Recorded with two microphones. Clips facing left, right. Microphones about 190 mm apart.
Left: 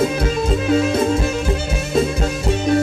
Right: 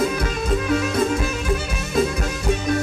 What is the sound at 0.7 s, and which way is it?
Music, 25° left (ahead or behind).